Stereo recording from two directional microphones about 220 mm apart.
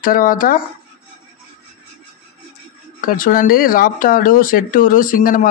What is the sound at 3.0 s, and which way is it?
Speech, 40° left (ahead or behind).